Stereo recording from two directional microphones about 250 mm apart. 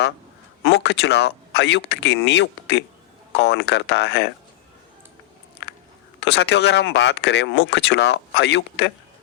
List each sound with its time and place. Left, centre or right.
0.6 s speech: left
6.1 s speech: left